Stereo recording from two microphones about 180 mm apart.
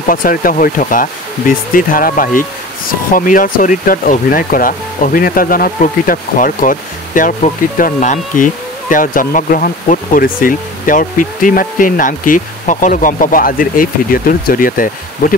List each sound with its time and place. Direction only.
0.1 s speech: 50° left (ahead or behind)